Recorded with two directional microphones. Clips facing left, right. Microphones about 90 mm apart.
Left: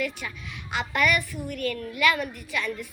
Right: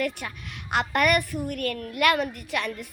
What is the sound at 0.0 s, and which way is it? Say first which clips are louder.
A woman's voice: right 2 dB; 50° right (ahead or behind).